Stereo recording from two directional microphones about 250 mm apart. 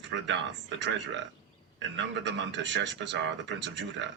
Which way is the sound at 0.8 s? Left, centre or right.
Right.